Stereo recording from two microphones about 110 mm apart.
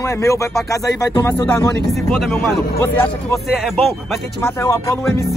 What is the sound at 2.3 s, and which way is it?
Speech, 20° left (ahead or behind).